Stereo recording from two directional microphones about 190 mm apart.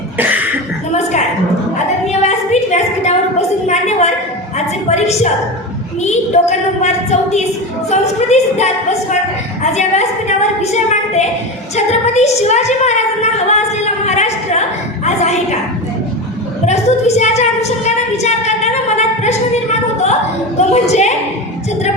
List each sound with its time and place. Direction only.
0.2 s cough: 10° right (ahead or behind)
2.5 s a sound: 35° left (ahead or behind)
4.5 s a woman's voice: 35° left (ahead or behind)
14.2 s a sound: 35° left (ahead or behind)
16.6 s a woman's voice: 35° left (ahead or behind)
20.6 s a woman's voice: 35° left (ahead or behind)